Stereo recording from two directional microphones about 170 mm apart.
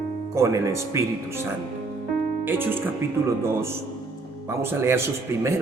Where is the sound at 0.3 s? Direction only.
20° right (ahead or behind).